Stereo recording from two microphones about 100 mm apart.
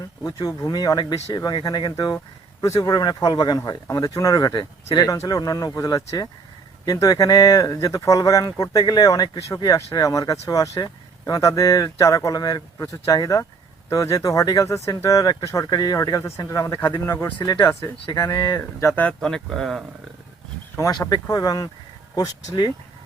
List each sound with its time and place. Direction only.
0.2 s speech: 40° left (ahead or behind)
17.3 s speech: 45° left (ahead or behind)
18.8 s speech: 25° left (ahead or behind)
19.0 s speech: 5° left (ahead or behind)
21.1 s speech: 35° left (ahead or behind)